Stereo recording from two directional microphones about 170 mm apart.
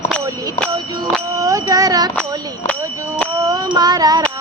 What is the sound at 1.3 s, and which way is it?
Child singing, 20° right (ahead or behind).